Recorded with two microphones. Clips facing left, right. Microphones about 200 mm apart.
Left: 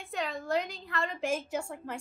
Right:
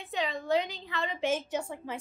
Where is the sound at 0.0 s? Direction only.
Centre (ahead or behind).